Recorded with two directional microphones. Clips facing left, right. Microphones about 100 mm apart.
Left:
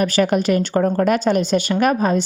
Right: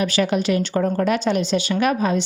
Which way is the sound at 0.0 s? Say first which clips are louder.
Left 3 dB; 45° left (ahead or behind).